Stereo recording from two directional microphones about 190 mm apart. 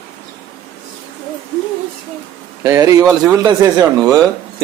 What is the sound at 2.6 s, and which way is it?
A man's voice, 15° right (ahead or behind).